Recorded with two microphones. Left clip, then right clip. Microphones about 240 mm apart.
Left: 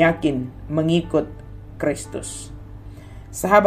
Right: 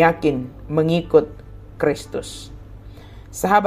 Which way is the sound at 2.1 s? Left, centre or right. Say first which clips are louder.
Right 3 dB; centre.